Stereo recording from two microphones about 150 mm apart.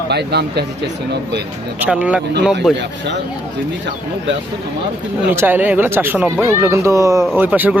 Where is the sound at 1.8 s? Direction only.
10° right (ahead or behind).